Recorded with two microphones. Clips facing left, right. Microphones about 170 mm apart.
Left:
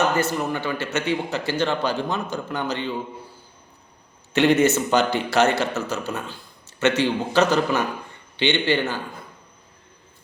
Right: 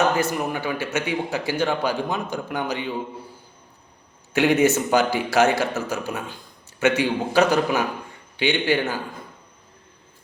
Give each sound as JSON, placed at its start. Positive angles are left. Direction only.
{"t": 0.2, "sound": "speech", "side_deg": -10}
{"t": 4.4, "sound": "speech", "side_deg": -10}